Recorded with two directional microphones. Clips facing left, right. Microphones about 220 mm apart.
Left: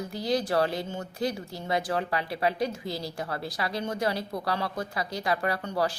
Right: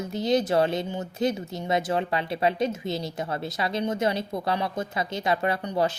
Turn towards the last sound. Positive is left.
turn(degrees=-20)  # may be behind; listen again after turning